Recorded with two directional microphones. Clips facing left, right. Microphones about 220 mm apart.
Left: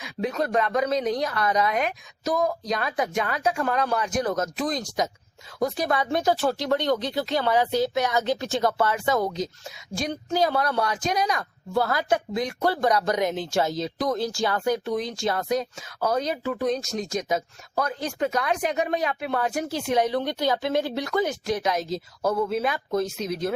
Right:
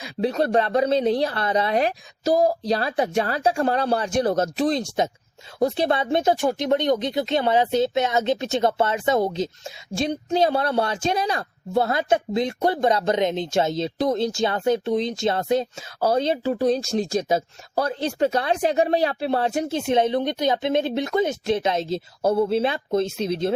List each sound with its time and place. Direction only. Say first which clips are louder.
0.0 s a woman's voice: right 4 dB; 30° right (ahead or behind)